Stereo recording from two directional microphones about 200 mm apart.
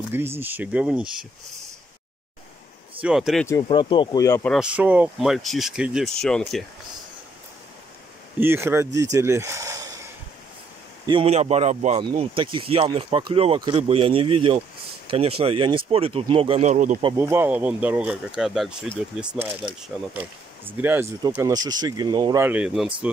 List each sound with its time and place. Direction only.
0.1 s speech: 10° right (ahead or behind)
3.0 s speech: 5° right (ahead or behind)
3.6 s speech: 25° left (ahead or behind)
4.6 s speech: 5° right (ahead or behind)
8.4 s speech: 10° right (ahead or behind)
11.1 s a man's voice: 30° right (ahead or behind)
12.0 s speech: 25° right (ahead or behind)
17.2 s speech: 10° right (ahead or behind)